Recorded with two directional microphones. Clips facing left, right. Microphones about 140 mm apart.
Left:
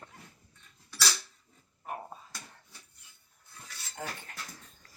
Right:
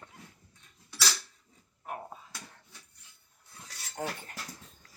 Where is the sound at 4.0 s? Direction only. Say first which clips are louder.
Right 4 dB; 30° right (ahead or behind).